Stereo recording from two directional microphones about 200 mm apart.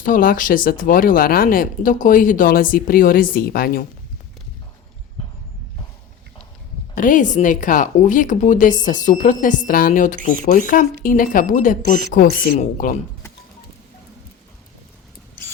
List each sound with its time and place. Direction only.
0.0 s speech: 45° left (ahead or behind)
6.9 s speech: 40° left (ahead or behind)